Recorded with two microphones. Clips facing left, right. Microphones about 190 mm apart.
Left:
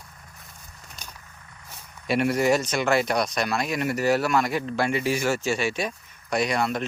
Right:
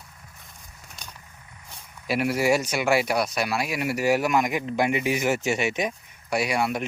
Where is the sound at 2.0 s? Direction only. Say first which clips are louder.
Left 1 dB; 5° right (ahead or behind).